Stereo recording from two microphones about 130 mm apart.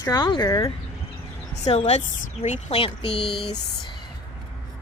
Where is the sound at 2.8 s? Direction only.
45° left (ahead or behind).